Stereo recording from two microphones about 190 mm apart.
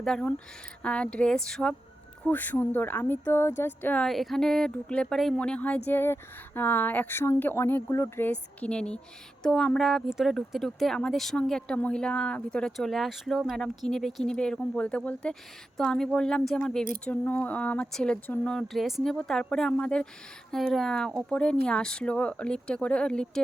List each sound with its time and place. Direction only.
0.0 s speech: 5° left (ahead or behind)